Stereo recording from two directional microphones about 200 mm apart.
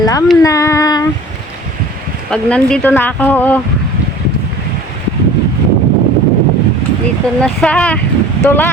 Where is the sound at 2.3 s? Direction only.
5° left (ahead or behind).